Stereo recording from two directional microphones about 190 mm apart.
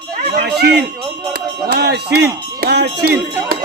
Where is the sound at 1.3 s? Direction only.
55° right (ahead or behind).